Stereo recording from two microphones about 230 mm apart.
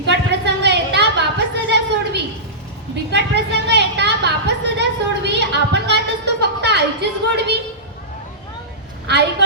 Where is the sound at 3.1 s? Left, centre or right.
Right.